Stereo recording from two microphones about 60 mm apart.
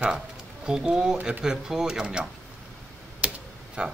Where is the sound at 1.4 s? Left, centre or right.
Centre.